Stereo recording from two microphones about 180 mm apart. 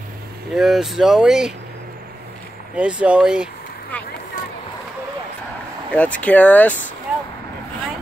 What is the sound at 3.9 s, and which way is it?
Speech, 10° left (ahead or behind).